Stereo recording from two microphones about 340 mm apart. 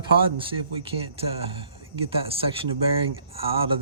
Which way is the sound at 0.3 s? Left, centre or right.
Centre.